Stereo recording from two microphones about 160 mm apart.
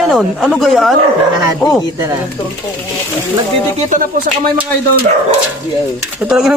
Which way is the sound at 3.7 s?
50° right (ahead or behind).